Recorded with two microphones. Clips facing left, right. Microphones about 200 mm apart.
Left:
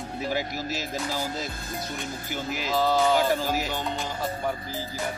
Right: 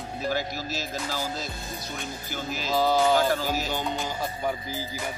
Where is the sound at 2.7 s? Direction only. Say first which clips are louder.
Right 1 dB; centre (ahead or behind).